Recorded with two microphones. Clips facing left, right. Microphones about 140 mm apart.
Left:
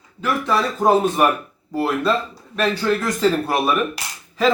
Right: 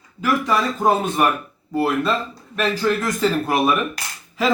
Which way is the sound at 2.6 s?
5° right (ahead or behind).